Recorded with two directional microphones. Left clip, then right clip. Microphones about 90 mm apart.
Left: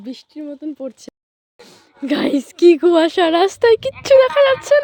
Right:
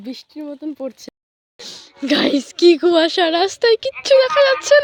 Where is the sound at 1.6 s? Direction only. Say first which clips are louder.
Right 9 dB; 5° left (ahead or behind).